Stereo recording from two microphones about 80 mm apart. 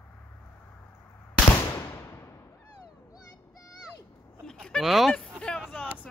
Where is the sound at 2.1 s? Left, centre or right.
Left.